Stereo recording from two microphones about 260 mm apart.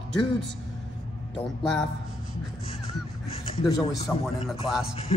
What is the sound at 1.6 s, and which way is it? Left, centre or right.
Speech, centre.